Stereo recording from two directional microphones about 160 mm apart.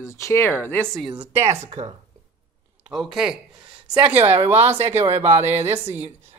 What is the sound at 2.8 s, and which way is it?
Speech, centre (ahead or behind).